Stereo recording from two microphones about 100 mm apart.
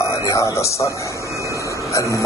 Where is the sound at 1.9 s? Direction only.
30° left (ahead or behind).